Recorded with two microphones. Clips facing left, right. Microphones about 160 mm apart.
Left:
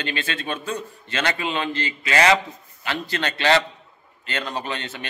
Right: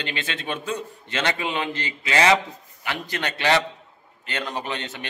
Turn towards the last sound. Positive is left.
turn(degrees=-20)  # may be behind; listen again after turning